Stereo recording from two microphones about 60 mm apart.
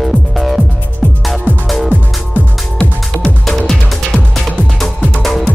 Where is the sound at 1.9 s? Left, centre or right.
Left.